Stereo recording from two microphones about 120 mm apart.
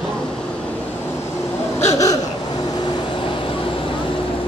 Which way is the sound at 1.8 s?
25° left (ahead or behind).